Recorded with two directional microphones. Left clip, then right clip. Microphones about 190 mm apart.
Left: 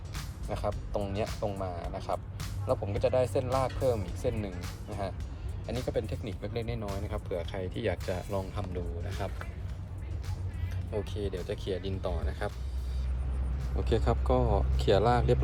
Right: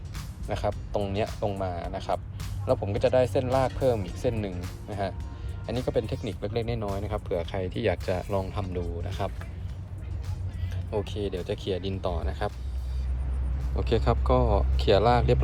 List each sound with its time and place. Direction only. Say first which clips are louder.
0.2 s speech: right 5 dB; 5° left (ahead or behind)
10.9 s speech: right 5 dB; 5° left (ahead or behind)
13.7 s speech: right 4 dB; 10° left (ahead or behind)